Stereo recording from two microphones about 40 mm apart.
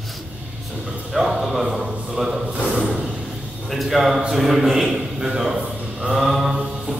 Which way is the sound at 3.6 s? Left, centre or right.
Centre.